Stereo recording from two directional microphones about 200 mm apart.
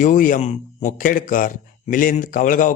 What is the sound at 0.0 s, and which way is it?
Speech, 40° left (ahead or behind).